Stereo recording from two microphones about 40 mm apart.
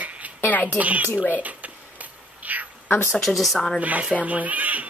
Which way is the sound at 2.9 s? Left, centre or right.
Left.